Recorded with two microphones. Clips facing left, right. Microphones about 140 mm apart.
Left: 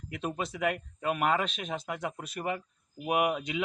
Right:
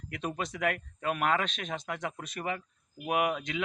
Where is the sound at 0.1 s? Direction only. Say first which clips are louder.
Left 1 dB; 5° left (ahead or behind).